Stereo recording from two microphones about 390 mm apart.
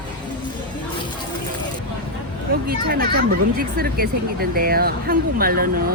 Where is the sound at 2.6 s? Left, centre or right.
Right.